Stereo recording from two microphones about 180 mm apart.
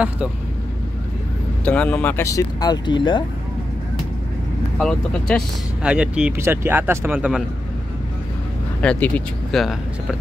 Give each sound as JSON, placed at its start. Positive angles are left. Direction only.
{"t": 1.6, "sound": "speech", "side_deg": 5}
{"t": 4.7, "sound": "speech", "side_deg": 5}
{"t": 8.8, "sound": "speech", "side_deg": 5}